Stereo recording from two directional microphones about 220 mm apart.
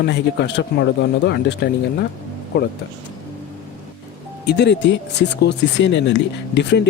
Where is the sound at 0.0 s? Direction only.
50° left (ahead or behind).